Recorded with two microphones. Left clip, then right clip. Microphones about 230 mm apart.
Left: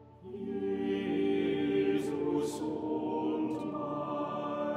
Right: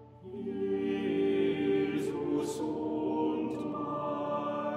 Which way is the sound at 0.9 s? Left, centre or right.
Centre.